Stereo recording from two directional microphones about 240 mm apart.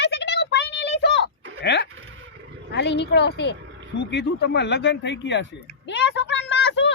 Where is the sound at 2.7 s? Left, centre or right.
Left.